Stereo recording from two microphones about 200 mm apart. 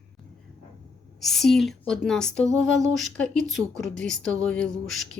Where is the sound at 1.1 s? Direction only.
Centre (ahead or behind).